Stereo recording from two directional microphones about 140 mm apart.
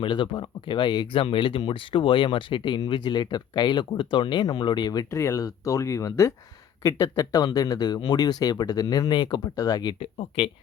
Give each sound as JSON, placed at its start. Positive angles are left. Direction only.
{"t": 0.0, "sound": "speech", "side_deg": 35}
{"t": 10.0, "sound": "speech", "side_deg": 40}